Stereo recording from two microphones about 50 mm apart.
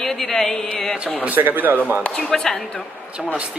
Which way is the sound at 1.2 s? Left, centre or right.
Right.